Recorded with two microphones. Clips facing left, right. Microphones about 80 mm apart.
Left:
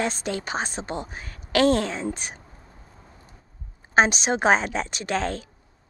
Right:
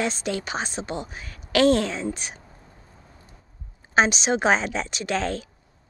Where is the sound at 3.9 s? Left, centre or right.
Left.